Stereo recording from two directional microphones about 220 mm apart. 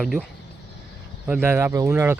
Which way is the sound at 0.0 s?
Centre (ahead or behind).